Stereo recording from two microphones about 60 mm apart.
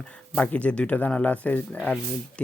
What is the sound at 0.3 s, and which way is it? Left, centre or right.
Speech, left.